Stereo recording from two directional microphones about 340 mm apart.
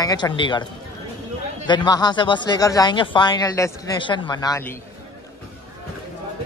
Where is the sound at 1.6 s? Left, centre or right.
Centre.